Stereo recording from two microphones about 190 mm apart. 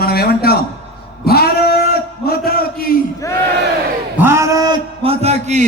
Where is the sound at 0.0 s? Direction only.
55° left (ahead or behind).